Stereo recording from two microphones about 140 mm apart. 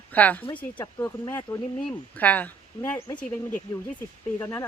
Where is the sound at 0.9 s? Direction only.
20° left (ahead or behind).